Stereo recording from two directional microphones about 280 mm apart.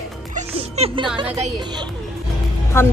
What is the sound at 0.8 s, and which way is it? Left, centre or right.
Speech, right.